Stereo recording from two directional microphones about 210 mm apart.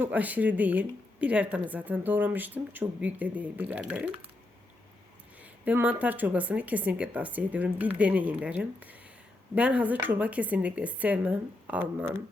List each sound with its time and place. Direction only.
0.0 s a woman's voice: 5° right (ahead or behind)
5.4 s a woman's voice: 5° right (ahead or behind)